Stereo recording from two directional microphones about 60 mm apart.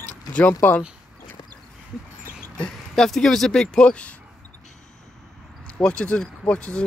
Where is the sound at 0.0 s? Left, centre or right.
Left.